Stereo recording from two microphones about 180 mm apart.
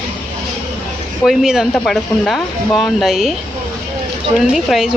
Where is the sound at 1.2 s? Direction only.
Centre (ahead or behind).